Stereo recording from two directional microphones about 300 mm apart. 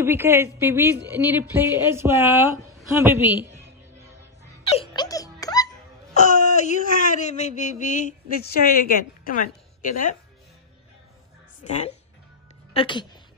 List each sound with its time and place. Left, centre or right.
0.0 s speech: centre
4.7 s baby laughter: centre
6.1 s a woman's voice: left
11.6 s speech: left